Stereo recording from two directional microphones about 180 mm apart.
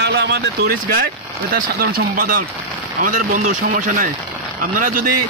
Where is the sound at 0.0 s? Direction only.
70° right (ahead or behind).